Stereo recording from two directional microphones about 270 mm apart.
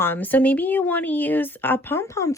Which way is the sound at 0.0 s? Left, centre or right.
Centre.